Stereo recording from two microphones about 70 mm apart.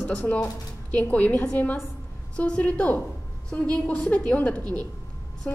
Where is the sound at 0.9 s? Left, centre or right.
Left.